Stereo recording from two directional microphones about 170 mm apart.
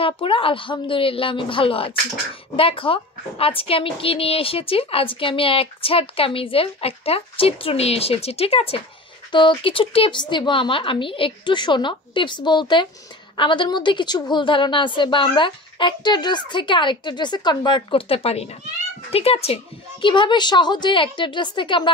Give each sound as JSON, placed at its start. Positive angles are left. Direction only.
{"t": 0.0, "sound": "a woman's voice", "side_deg": 30}